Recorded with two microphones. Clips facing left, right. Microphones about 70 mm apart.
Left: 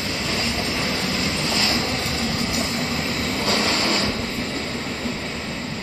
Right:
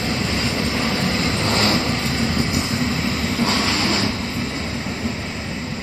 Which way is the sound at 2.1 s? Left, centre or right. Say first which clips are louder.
Right 3 dB; right.